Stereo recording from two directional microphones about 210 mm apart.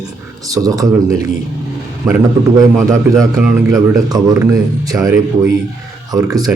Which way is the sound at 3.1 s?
15° right (ahead or behind).